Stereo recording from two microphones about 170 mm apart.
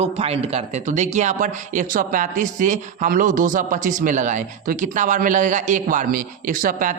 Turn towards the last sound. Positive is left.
turn(degrees=-50)  # may be behind; listen again after turning